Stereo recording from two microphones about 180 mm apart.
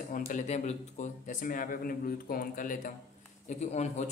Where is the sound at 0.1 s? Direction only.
45° left (ahead or behind).